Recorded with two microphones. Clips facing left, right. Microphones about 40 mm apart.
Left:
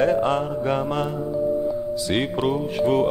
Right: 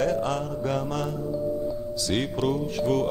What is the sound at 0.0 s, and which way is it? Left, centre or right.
Music, left.